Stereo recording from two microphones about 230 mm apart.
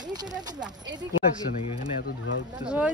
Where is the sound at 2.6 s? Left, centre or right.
Centre.